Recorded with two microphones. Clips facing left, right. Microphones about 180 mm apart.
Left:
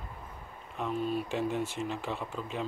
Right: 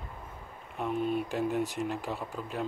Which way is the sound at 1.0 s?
55° right (ahead or behind).